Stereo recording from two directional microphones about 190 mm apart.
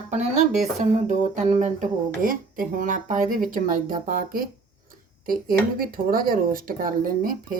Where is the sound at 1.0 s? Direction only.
40° right (ahead or behind).